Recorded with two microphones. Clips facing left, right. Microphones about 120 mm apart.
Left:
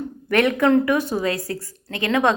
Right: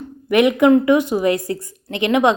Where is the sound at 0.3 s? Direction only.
15° right (ahead or behind).